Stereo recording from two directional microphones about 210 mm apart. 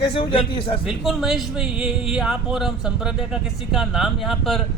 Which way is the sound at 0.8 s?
Centre (ahead or behind).